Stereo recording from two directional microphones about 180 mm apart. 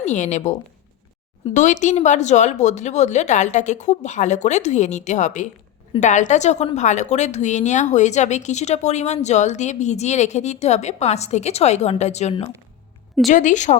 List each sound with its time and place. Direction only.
0.0 s a woman's voice: 40° left (ahead or behind)
1.5 s a woman's voice: 45° left (ahead or behind)